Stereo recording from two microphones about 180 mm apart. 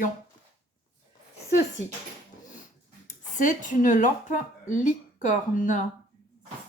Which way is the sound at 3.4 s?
45° left (ahead or behind).